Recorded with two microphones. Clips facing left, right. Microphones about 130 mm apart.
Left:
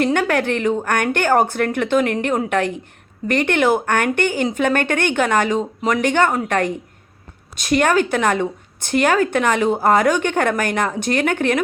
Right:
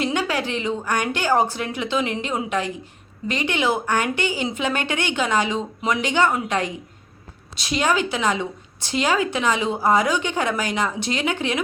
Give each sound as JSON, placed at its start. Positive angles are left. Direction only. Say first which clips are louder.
{"t": 0.0, "sound": "a woman's voice", "louder": "left 5 dB", "side_deg": 55}